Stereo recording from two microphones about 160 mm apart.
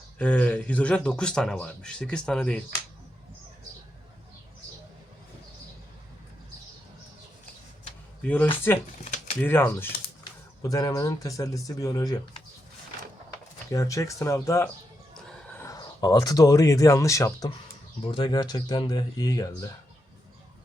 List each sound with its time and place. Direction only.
0.2 s speech: 10° left (ahead or behind)
8.7 s speech: 15° left (ahead or behind)
9.0 s typewriter: 50° left (ahead or behind)
9.4 s speech: 15° left (ahead or behind)
13.7 s speech: 20° left (ahead or behind)
15.1 s horse: 5° left (ahead or behind)
15.6 s speech: 25° left (ahead or behind)
18.0 s speech: 30° left (ahead or behind)